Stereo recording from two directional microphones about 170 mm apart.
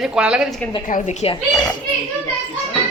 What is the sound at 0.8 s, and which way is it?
Speech, 45° left (ahead or behind).